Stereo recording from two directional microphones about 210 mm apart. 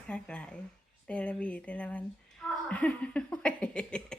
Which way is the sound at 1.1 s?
5° left (ahead or behind).